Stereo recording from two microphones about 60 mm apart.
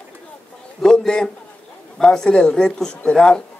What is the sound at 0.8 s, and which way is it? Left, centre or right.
A man's voice, centre.